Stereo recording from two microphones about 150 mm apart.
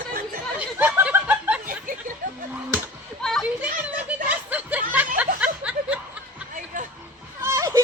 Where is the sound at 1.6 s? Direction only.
60° right (ahead or behind).